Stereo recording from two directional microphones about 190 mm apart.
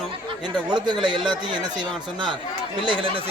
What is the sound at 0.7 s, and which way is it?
Speech, 25° right (ahead or behind).